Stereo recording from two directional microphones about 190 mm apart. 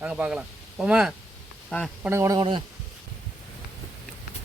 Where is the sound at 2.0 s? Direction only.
15° right (ahead or behind).